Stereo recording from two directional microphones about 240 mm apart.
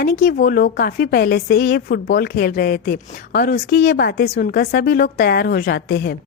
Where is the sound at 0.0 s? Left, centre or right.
Left.